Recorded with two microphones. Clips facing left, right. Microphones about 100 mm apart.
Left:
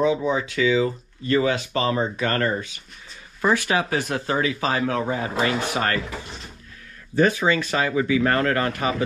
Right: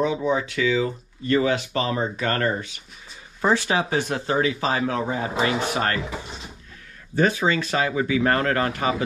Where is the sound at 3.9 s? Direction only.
25° right (ahead or behind).